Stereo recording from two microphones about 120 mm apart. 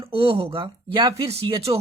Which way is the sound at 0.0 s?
50° right (ahead or behind).